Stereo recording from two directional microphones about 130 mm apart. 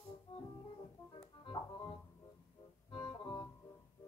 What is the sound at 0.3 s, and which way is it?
Music, 45° left (ahead or behind).